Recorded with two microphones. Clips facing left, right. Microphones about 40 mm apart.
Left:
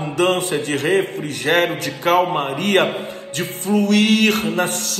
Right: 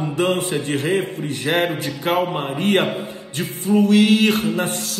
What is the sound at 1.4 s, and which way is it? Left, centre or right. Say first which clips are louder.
Speech: left 3 dB; left.